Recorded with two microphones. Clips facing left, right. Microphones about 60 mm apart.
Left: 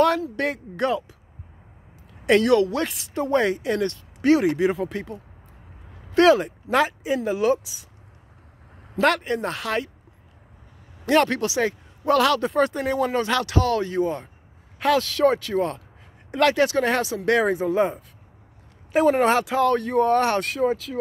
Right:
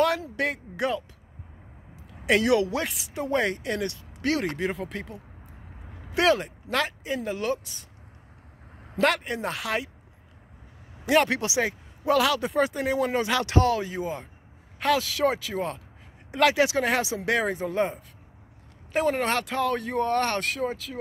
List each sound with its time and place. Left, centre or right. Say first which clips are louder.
0.4 s speech: left 3 dB; centre
2.4 s speech: left 4 dB; centre
2.8 s speech: left 5 dB; centre
6.2 s speech: left 5 dB; centre
8.9 s speech: left 3 dB; centre
11.1 s speech: left 3 dB; centre
12.0 s speech: left 3 dB; centre
17.3 s speech: left 7 dB; centre